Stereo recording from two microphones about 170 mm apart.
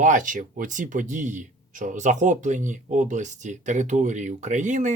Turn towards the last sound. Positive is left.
turn(degrees=-45)  # may be behind; listen again after turning